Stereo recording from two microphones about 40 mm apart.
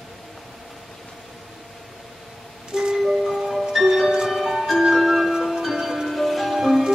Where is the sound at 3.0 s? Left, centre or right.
Centre.